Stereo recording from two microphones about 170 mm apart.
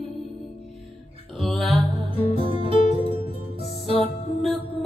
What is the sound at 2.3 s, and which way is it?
Music, 30° right (ahead or behind).